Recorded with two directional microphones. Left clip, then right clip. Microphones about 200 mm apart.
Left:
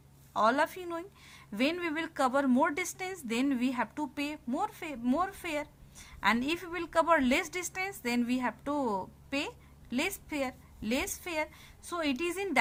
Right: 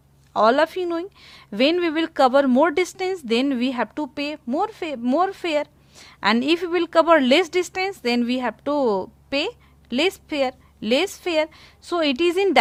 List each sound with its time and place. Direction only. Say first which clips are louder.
0.3 s a woman's voice: right 10 dB; 45° right (ahead or behind)